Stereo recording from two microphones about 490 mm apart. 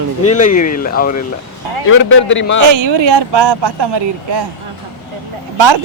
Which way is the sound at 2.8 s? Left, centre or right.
Right.